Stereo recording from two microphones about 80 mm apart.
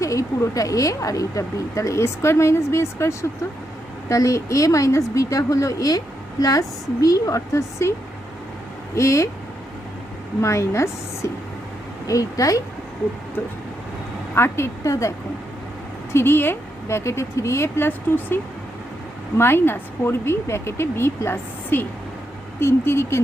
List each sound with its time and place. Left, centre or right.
0.0 s a woman's voice: left
9.0 s speech: left
10.4 s a woman's voice: left
14.3 s speech: left
16.1 s speech: left
19.4 s speech: left